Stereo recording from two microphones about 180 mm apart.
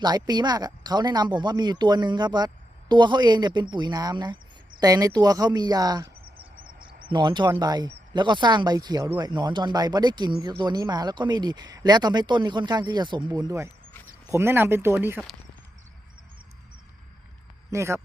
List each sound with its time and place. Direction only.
0.0 s speech: 20° right (ahead or behind)
17.7 s speech: 15° right (ahead or behind)